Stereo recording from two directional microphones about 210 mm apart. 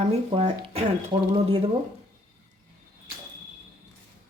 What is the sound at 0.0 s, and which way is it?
Speech, 30° right (ahead or behind).